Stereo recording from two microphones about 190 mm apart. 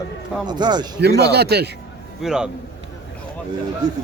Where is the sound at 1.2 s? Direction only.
60° right (ahead or behind).